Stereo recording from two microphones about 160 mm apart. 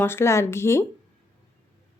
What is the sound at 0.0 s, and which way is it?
Speech, 15° left (ahead or behind).